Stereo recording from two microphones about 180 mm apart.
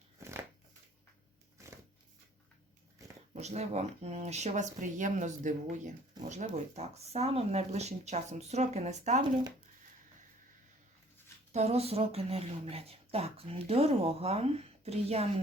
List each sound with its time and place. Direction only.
0.2 s shuffling cards: 15° right (ahead or behind)
3.3 s speech: 40° right (ahead or behind)
11.5 s speech: 35° right (ahead or behind)